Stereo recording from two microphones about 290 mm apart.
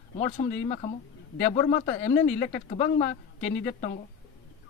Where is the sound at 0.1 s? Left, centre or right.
Left.